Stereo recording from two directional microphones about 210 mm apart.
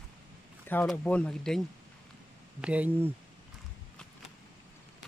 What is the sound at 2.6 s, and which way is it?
Speech, 5° right (ahead or behind).